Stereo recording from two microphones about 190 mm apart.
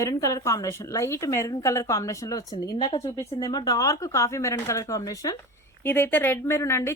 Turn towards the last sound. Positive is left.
turn(degrees=15)  # may be behind; listen again after turning